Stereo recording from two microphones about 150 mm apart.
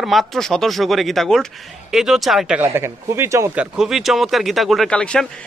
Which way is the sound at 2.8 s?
20° right (ahead or behind).